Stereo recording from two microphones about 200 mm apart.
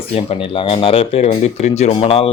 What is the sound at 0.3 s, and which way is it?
Speech, 25° left (ahead or behind).